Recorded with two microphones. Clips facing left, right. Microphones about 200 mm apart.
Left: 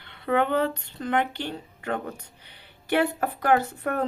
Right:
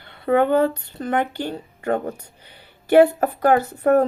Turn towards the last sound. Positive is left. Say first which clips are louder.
# right 8 dB
turn(degrees=-40)  # may be behind; listen again after turning